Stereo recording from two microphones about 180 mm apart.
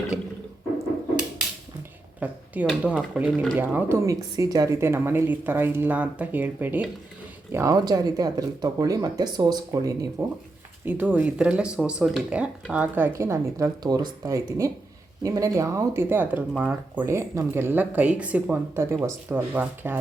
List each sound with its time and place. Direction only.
2.2 s speech: 10° right (ahead or behind)